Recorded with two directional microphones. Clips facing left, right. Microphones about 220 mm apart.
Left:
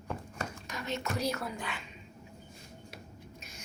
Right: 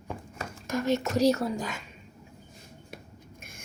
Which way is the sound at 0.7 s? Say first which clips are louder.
Right 15 dB; 45° right (ahead or behind).